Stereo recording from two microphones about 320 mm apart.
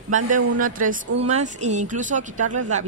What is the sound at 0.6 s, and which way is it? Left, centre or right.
Speech, right.